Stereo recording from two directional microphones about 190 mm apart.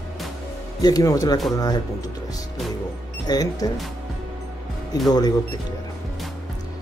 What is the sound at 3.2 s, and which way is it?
Speech, 20° left (ahead or behind).